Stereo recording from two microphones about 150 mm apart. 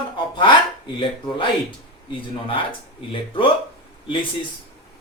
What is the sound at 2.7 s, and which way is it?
Speech, 35° left (ahead or behind).